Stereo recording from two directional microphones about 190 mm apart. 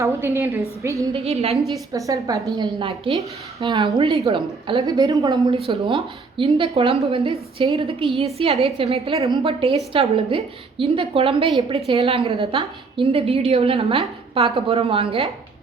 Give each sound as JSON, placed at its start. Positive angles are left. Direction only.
{"t": 0.0, "sound": "a woman's voice", "side_deg": -15}
{"t": 1.1, "sound": "a woman's voice", "side_deg": -30}
{"t": 1.7, "sound": "a woman's voice", "side_deg": -15}